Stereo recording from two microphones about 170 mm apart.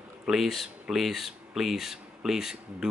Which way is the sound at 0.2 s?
5° right (ahead or behind).